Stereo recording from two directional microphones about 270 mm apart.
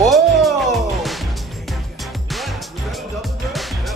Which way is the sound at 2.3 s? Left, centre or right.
Centre.